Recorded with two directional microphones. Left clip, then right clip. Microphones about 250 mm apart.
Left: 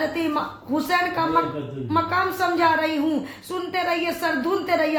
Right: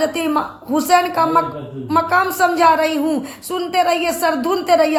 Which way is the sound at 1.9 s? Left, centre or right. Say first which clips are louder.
Right 6 dB; right.